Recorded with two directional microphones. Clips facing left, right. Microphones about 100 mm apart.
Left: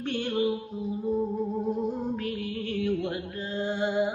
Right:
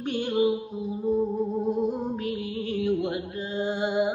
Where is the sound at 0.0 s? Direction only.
15° right (ahead or behind).